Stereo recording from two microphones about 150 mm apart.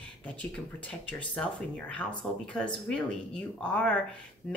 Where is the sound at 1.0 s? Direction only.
5° left (ahead or behind).